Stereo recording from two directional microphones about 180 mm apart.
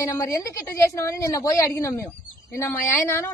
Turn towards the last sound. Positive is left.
turn(degrees=15)  # may be behind; listen again after turning